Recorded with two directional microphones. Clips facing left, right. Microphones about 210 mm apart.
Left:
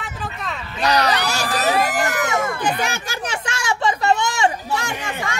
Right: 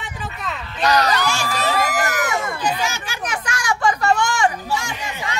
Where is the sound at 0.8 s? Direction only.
35° left (ahead or behind).